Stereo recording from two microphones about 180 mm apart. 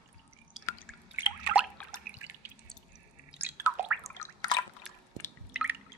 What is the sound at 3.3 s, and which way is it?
Drip, 10° right (ahead or behind).